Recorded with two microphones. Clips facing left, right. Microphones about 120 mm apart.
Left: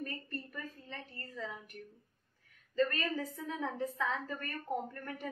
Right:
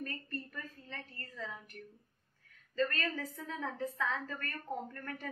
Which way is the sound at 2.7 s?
15° left (ahead or behind).